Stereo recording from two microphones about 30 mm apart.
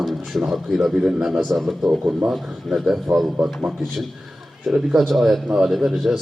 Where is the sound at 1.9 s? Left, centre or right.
Right.